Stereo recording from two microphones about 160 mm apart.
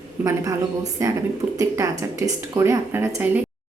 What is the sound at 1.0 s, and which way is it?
Speech, 20° right (ahead or behind).